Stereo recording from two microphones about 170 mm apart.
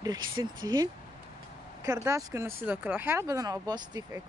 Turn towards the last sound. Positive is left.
turn(degrees=-20)  # may be behind; listen again after turning